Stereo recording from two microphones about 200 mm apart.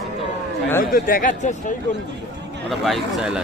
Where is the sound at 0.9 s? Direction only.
45° left (ahead or behind).